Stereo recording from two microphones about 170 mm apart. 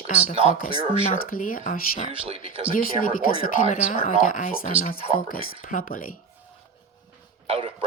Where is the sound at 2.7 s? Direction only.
50° left (ahead or behind).